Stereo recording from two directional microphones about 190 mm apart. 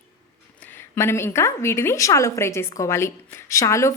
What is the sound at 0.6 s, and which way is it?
A woman's voice, 10° left (ahead or behind).